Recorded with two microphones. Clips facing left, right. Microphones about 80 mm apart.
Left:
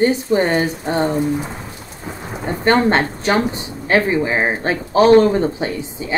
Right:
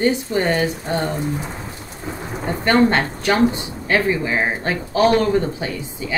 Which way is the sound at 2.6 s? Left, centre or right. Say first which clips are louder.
Left 1 dB; left.